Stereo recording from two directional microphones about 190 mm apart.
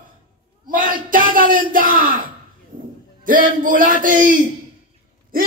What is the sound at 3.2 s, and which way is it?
Speech, 45° right (ahead or behind).